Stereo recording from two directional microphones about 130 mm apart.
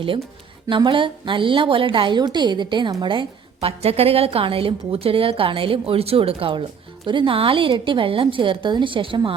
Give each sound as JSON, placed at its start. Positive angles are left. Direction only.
{"t": 0.7, "sound": "a woman's voice", "side_deg": -40}